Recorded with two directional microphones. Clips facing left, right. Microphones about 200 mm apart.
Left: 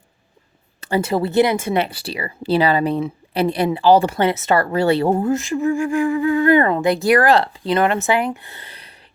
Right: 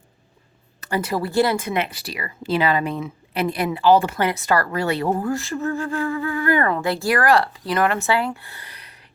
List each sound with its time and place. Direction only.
0.8 s speech: 30° left (ahead or behind)